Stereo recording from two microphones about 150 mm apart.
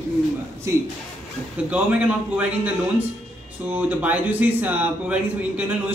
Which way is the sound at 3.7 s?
10° right (ahead or behind).